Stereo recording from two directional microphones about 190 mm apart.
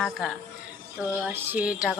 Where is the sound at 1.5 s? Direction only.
5° right (ahead or behind).